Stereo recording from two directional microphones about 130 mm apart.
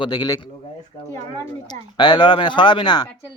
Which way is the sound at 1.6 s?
35° left (ahead or behind).